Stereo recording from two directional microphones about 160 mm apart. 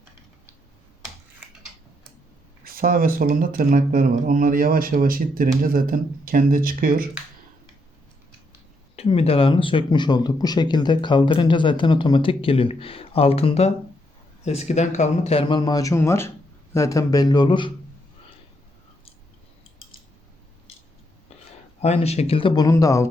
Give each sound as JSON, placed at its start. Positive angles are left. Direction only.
{"t": 2.6, "sound": "speech", "side_deg": -65}
{"t": 4.1, "sound": "speech", "side_deg": -55}
{"t": 9.0, "sound": "speech", "side_deg": 40}
{"t": 21.8, "sound": "speech", "side_deg": 40}